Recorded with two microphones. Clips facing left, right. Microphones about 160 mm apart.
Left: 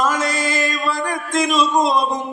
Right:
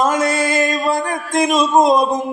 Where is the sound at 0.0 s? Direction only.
55° right (ahead or behind).